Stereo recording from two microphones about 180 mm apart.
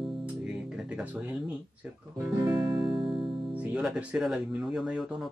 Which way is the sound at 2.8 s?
Centre (ahead or behind).